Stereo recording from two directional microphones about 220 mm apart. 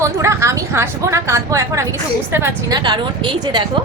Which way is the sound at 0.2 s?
15° right (ahead or behind).